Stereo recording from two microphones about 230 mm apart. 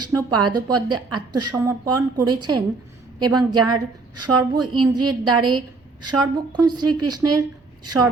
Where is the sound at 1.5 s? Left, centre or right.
Centre.